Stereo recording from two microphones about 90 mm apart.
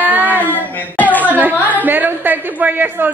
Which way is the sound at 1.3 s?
20° right (ahead or behind).